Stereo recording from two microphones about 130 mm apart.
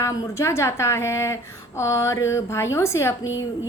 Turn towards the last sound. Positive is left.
turn(degrees=25)  # may be behind; listen again after turning